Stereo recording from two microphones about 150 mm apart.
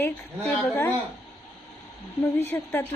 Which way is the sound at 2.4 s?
10° left (ahead or behind).